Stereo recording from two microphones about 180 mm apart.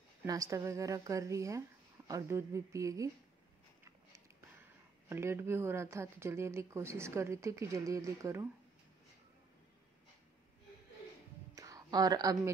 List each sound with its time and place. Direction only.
0.2 s speech: 20° right (ahead or behind)
5.1 s speech: 15° right (ahead or behind)
11.5 s a sound: 20° right (ahead or behind)